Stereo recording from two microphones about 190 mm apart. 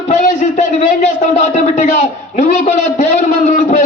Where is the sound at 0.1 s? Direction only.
40° left (ahead or behind).